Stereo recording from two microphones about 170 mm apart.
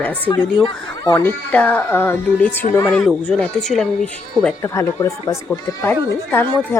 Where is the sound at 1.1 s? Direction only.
10° left (ahead or behind).